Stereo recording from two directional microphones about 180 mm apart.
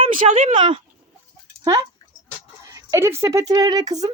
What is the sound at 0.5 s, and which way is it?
Speech, 30° right (ahead or behind).